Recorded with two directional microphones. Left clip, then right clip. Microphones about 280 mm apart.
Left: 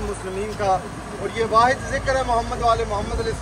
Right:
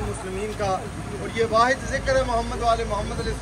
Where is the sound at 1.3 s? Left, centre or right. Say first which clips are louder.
Left 2 dB; left.